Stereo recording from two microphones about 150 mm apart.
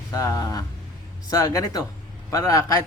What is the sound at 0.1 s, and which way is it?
Speech, 25° left (ahead or behind).